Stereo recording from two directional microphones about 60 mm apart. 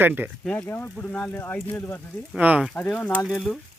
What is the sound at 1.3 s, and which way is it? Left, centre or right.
Speech, left.